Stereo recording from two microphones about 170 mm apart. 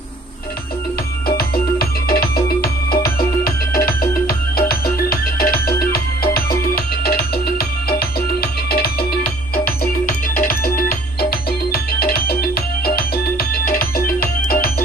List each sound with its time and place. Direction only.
1.4 s music: 60° left (ahead or behind)